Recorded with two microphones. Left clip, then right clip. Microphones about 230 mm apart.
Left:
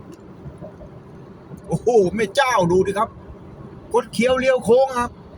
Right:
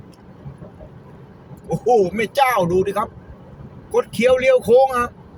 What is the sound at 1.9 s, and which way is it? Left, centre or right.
Speech, centre.